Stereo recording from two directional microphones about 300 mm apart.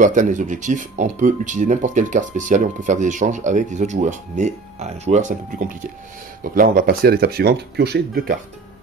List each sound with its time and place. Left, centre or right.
0.0 s speech: right
6.5 s speech: right